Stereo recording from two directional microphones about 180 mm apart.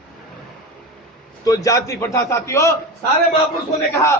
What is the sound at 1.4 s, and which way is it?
A man's voice, 20° left (ahead or behind).